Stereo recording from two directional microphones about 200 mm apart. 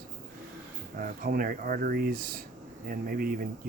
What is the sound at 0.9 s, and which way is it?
Speech, 45° right (ahead or behind).